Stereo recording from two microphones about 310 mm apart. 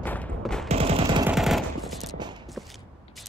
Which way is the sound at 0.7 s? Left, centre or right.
Centre.